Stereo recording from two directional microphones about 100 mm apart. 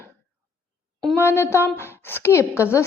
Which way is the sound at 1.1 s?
25° left (ahead or behind).